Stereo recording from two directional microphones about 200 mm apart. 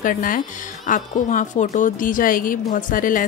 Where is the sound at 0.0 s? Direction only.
45° left (ahead or behind).